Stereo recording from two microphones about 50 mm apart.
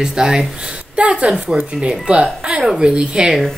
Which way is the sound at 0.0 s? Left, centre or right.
Centre.